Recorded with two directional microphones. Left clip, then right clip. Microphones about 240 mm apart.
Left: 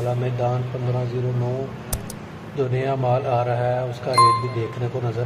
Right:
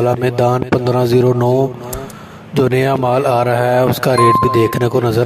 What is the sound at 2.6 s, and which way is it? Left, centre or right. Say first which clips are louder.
Speech: right 9 dB; right.